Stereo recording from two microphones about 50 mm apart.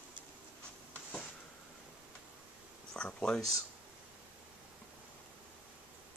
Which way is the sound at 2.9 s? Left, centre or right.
Centre.